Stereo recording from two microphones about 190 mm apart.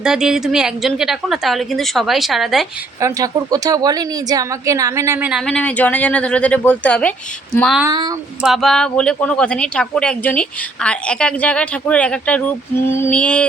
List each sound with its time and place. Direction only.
0.0 s speech: 5° right (ahead or behind)
3.0 s a woman's voice: 20° right (ahead or behind)
5.5 s speech: 5° left (ahead or behind)
7.9 s speech: 20° right (ahead or behind)
8.4 s speech: centre (ahead or behind)